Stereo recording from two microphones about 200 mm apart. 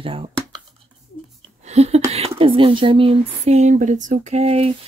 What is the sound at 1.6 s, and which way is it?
Speech, 35° right (ahead or behind).